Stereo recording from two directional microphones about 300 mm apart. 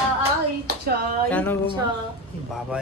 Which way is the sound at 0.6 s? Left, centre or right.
Right.